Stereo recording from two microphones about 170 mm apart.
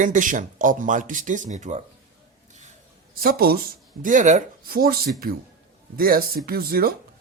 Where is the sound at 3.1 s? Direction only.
60° right (ahead or behind).